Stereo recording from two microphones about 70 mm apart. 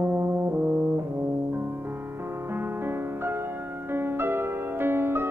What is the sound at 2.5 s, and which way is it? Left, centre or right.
Music, right.